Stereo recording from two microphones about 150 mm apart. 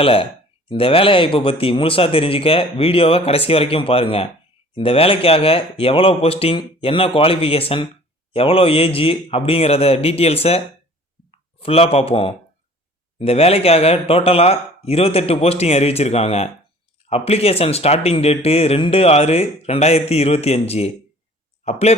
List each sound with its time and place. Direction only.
0.0 s speech: 35° left (ahead or behind)